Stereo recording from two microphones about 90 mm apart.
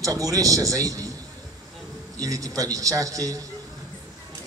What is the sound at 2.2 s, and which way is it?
A man's voice, 40° right (ahead or behind).